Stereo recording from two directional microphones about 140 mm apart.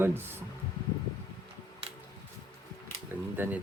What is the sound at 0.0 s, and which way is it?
Speech, 15° right (ahead or behind).